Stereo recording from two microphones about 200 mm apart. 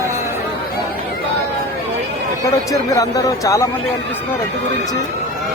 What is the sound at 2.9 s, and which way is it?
Speech, 15° left (ahead or behind).